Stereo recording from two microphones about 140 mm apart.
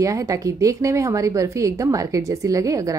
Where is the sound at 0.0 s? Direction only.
25° right (ahead or behind).